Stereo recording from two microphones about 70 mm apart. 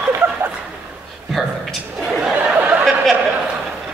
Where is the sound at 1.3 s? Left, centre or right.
Centre.